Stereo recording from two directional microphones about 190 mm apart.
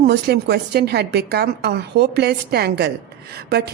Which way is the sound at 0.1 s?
60° right (ahead or behind).